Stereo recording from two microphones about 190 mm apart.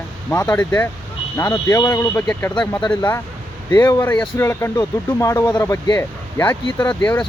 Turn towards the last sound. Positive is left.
turn(degrees=10)  # may be behind; listen again after turning